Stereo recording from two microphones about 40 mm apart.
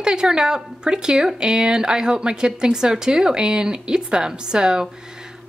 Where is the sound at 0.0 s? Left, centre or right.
Right.